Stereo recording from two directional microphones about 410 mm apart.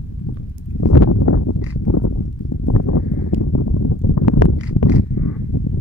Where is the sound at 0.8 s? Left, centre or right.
Left.